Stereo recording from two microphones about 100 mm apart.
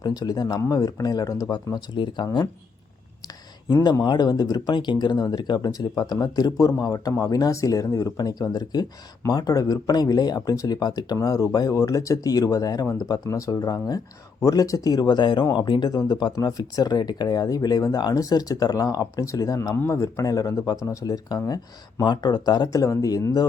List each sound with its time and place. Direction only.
0.0 s speech: 40° left (ahead or behind)
4.0 s speech: 45° left (ahead or behind)